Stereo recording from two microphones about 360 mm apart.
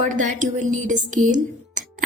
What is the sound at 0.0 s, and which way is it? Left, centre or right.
A woman's voice, right.